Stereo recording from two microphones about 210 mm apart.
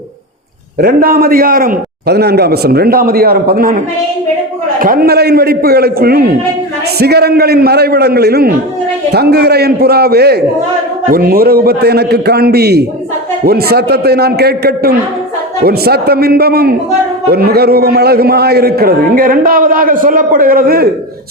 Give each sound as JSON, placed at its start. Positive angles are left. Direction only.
{"t": 0.8, "sound": "a man's voice", "side_deg": -45}